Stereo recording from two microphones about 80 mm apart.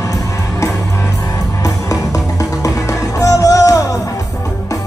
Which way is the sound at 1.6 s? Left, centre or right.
Left.